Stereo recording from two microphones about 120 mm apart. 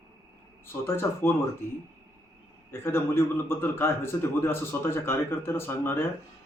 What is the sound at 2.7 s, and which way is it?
A man's voice, 20° left (ahead or behind).